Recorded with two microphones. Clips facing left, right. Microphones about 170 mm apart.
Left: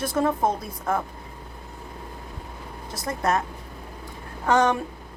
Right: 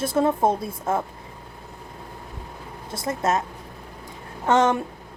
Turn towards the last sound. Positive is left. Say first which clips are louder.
# right 1 dB
turn(degrees=-25)  # may be behind; listen again after turning